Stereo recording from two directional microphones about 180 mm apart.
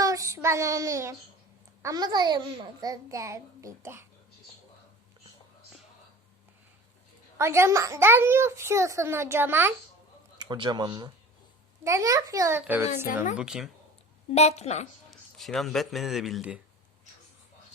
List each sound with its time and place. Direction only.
0.0 s child singing: 20° right (ahead or behind)
1.8 s a child's voice: 20° right (ahead or behind)
7.3 s a child's voice: 15° right (ahead or behind)
10.3 s a child's voice: 25° right (ahead or behind); by 13.7 s 5° right (ahead or behind)
14.3 s a woman's voice: 35° left (ahead or behind)
15.4 s speech: centre (ahead or behind)